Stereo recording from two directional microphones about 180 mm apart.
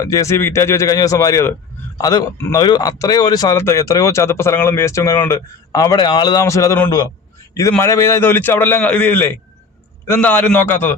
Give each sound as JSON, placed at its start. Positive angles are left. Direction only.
{"t": 0.0, "sound": "speech", "side_deg": 20}